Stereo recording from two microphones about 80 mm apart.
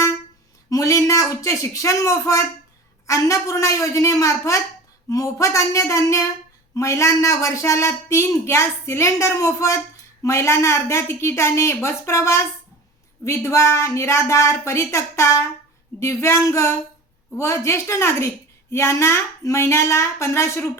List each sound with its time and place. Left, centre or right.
0.7 s a woman's voice: left